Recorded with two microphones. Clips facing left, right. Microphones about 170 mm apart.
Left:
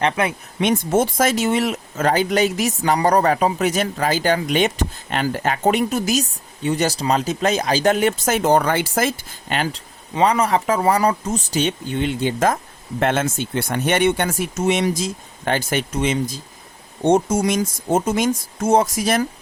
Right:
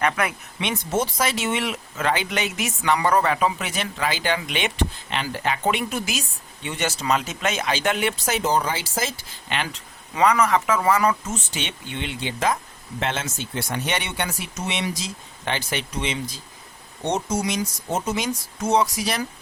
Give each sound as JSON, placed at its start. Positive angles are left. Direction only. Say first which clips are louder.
{"t": 0.0, "sound": "speech", "louder": "left 3 dB", "side_deg": 30}
{"t": 0.6, "sound": "speech", "louder": "left 7 dB", "side_deg": 50}